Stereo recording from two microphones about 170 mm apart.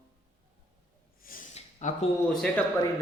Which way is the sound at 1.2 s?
55° left (ahead or behind).